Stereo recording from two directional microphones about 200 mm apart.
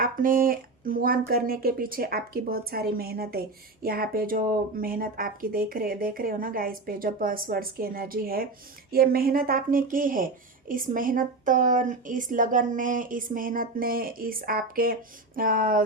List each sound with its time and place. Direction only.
0.0 s speech: 45° right (ahead or behind)